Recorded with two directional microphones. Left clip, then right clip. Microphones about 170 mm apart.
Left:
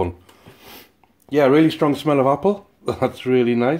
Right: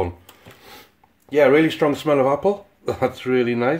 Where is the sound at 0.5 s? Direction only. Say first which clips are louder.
Left 1 dB; 35° left (ahead or behind).